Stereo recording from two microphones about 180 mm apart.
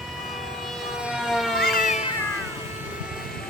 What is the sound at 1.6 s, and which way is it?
Cat, 55° left (ahead or behind).